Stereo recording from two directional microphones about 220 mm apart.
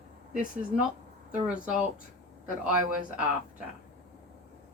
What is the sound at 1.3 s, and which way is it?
Speech, 5° right (ahead or behind).